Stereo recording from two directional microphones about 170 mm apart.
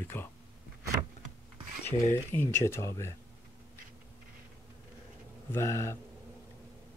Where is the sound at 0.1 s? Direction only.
15° left (ahead or behind).